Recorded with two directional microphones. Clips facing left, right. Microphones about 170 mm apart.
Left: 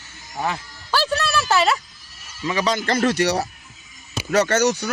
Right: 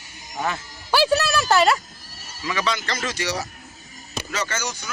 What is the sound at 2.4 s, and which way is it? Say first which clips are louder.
Speech: left 3 dB; 30° left (ahead or behind).